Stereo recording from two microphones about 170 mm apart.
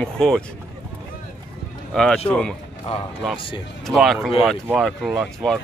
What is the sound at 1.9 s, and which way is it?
Speech, 5° left (ahead or behind).